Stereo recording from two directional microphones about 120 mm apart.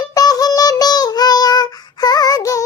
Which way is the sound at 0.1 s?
30° left (ahead or behind).